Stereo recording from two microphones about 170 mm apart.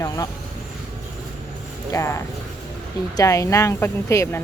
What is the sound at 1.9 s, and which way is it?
Speech, 15° left (ahead or behind).